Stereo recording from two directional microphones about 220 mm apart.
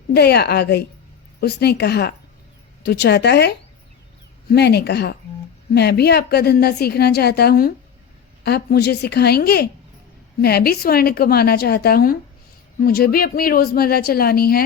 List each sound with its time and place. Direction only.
0.1 s a woman's voice: 45° left (ahead or behind)